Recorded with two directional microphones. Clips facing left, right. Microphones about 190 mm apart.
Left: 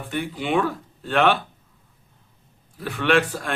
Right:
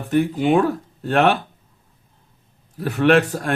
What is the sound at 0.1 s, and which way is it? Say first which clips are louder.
A man's voice: right 7 dB; 40° right (ahead or behind).